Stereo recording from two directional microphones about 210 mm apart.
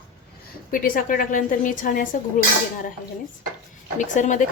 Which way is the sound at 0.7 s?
40° left (ahead or behind).